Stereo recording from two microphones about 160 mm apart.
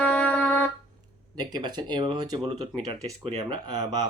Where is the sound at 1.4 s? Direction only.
25° right (ahead or behind).